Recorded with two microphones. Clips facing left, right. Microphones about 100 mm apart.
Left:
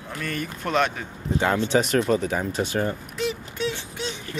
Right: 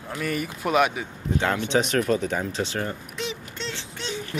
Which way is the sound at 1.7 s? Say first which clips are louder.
Left 1 dB; 5° left (ahead or behind).